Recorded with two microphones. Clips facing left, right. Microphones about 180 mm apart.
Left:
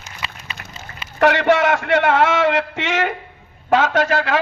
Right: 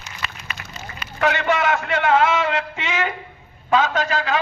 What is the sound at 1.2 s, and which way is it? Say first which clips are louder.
A man's voice: left 5 dB; 70° left (ahead or behind).